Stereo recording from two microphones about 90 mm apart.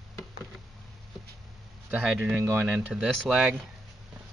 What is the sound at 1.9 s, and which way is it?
Speech, 10° right (ahead or behind).